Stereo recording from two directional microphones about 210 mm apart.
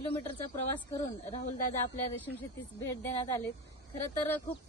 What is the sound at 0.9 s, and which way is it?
Speech, 30° left (ahead or behind).